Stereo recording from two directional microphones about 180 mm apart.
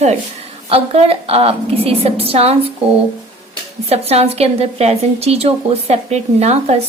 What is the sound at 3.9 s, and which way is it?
A woman's voice, 35° right (ahead or behind).